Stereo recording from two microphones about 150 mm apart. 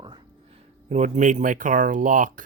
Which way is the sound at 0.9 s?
50° right (ahead or behind).